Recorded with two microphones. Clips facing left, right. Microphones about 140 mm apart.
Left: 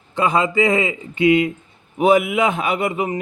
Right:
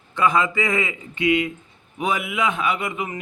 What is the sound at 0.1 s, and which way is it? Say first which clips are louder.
A man's voice: left 2 dB; 30° left (ahead or behind).